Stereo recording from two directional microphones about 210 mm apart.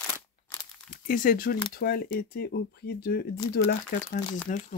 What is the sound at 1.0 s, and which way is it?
Speech, 40° left (ahead or behind).